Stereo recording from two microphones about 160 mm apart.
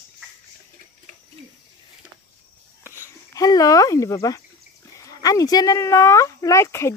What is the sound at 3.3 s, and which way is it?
Speech, 20° left (ahead or behind).